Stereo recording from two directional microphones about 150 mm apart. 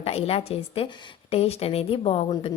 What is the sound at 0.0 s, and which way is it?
A woman's voice, 40° left (ahead or behind).